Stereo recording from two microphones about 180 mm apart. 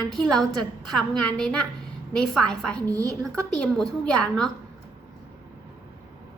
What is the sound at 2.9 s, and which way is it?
Speech, 20° right (ahead or behind).